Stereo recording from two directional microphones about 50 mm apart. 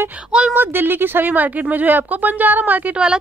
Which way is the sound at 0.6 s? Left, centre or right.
Right.